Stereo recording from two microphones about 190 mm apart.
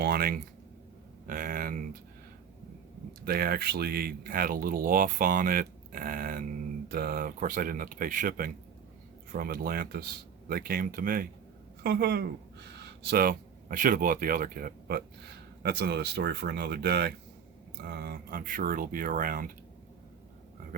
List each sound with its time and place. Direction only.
0.0 s a sound: 55° right (ahead or behind)
1.3 s speech: 45° right (ahead or behind)
3.2 s speech: 50° right (ahead or behind)
11.8 s speech: 60° right (ahead or behind)